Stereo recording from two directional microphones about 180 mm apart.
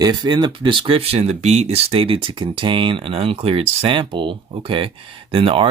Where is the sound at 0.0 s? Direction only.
25° right (ahead or behind).